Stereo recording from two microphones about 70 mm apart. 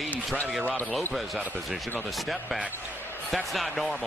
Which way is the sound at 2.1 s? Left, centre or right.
Centre.